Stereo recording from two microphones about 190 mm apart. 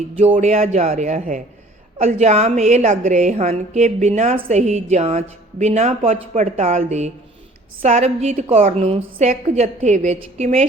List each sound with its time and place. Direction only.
0.3 s a woman's voice: 35° right (ahead or behind)